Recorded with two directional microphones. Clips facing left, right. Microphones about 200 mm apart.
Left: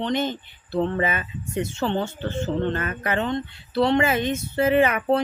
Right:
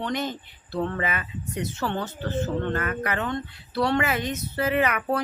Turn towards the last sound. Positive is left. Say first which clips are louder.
# left 5 dB
turn(degrees=25)  # may be behind; listen again after turning